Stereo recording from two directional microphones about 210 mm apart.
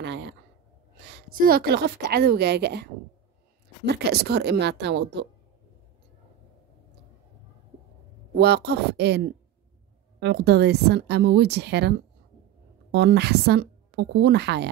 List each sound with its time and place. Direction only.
0.0 s a sound: 55° right (ahead or behind)
0.9 s a woman's voice: 50° right (ahead or behind)
8.4 s a woman's voice: 50° right (ahead or behind)
10.2 s a woman's voice: 50° right (ahead or behind)
12.9 s a woman's voice: 55° right (ahead or behind)